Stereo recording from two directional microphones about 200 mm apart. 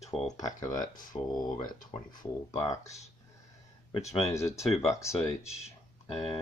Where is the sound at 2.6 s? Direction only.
15° left (ahead or behind).